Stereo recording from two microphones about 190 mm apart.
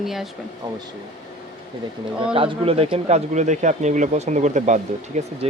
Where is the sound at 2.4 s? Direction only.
30° right (ahead or behind).